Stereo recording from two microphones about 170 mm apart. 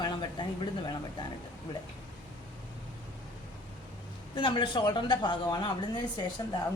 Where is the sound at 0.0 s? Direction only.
25° left (ahead or behind).